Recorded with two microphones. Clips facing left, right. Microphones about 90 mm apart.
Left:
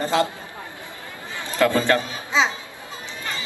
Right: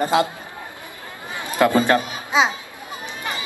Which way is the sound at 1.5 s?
15° right (ahead or behind).